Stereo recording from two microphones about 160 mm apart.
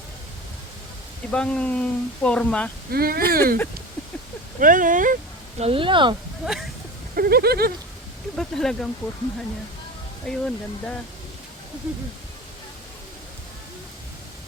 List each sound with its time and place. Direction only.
1.3 s speech: 5° left (ahead or behind)
2.9 s speech: 70° right (ahead or behind)
4.6 s speech: 55° right (ahead or behind)
5.5 s speech: 35° right (ahead or behind)
6.4 s speech: centre (ahead or behind)
7.2 s speech: 75° right (ahead or behind)
8.4 s speech: 5° left (ahead or behind)
10.2 s speech: 5° left (ahead or behind)